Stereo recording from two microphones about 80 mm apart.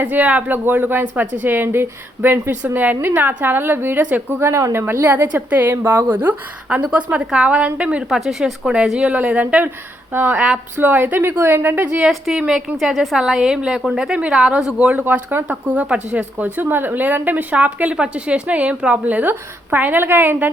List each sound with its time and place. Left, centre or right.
0.0 s a woman's voice: centre
4.4 s a woman's voice: right; by 8.2 s centre
8.2 s a woman's voice: centre; by 11.9 s right
11.9 s a woman's voice: centre; by 20.5 s right